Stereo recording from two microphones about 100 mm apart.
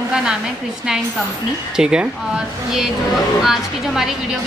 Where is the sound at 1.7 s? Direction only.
10° right (ahead or behind).